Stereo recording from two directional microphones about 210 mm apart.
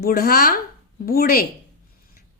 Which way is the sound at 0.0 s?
45° left (ahead or behind).